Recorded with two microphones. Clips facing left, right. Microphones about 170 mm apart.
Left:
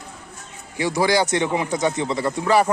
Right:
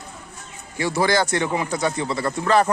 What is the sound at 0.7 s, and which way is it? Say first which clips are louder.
Speech: left 1 dB; 15° left (ahead or behind).